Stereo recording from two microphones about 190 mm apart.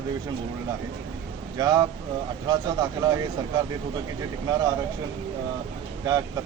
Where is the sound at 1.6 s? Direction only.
20° right (ahead or behind).